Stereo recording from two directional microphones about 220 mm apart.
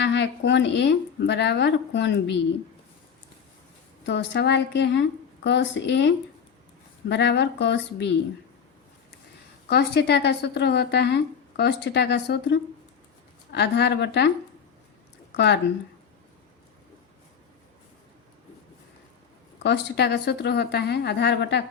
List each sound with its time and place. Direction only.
0.0 s speech: 55° left (ahead or behind)
4.0 s speech: 55° left (ahead or behind)
9.6 s speech: 45° left (ahead or behind)
19.6 s speech: 50° left (ahead or behind)